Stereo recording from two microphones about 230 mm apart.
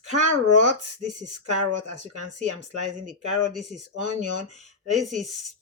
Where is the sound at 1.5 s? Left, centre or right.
Right.